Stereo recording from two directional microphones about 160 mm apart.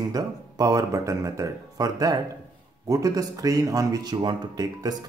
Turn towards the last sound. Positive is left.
turn(degrees=-25)  # may be behind; listen again after turning